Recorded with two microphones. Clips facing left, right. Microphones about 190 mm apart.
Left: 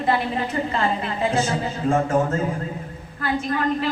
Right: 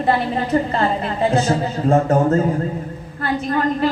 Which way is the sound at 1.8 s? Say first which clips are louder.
Right 5 dB; 40° right (ahead or behind).